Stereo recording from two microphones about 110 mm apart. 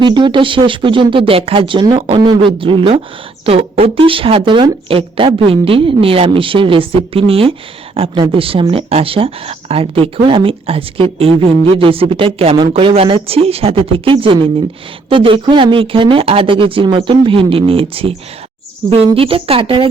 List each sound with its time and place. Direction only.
0.0 s speech: 45° right (ahead or behind)